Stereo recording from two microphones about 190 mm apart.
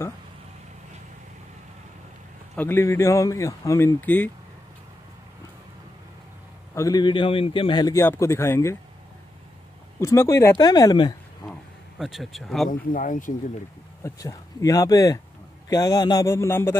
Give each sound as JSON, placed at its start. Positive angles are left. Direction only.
{"t": 2.5, "sound": "a man's voice", "side_deg": 10}
{"t": 6.7, "sound": "a man's voice", "side_deg": 15}
{"t": 9.9, "sound": "a man's voice", "side_deg": 15}
{"t": 12.0, "sound": "speech", "side_deg": 0}
{"t": 12.6, "sound": "speech", "side_deg": 45}
{"t": 14.0, "sound": "a man's voice", "side_deg": 20}